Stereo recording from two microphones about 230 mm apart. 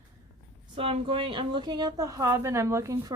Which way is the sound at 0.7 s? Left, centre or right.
Right.